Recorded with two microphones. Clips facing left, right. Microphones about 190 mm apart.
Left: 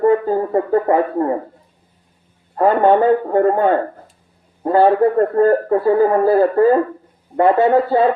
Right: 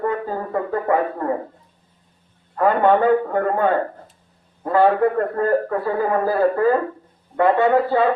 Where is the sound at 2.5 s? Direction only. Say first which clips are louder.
Left 3 dB; 30° left (ahead or behind).